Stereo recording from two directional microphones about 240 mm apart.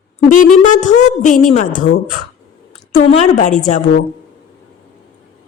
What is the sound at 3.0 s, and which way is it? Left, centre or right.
Speech, left.